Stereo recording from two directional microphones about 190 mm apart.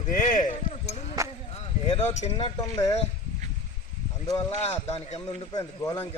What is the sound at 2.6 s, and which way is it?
Speech, 20° left (ahead or behind).